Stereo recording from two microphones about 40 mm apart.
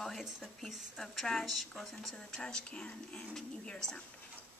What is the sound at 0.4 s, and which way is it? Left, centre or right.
Speech, centre.